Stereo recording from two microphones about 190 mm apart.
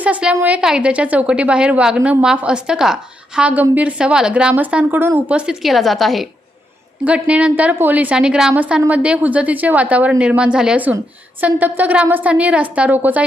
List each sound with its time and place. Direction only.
0.0 s a woman's voice: 5° right (ahead or behind)